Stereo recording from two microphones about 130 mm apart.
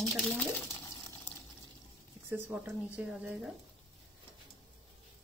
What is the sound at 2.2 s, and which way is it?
A woman's voice, 15° right (ahead or behind).